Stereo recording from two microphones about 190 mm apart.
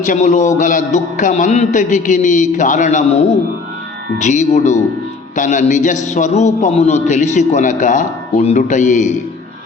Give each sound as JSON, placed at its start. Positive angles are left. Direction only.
{"t": 0.0, "sound": "a man's voice", "side_deg": 40}
{"t": 4.2, "sound": "a man's voice", "side_deg": 40}